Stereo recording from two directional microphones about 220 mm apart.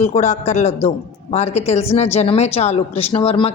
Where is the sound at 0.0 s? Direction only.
30° left (ahead or behind).